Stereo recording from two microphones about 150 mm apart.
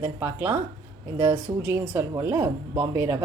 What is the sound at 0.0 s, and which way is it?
Speech, 15° right (ahead or behind).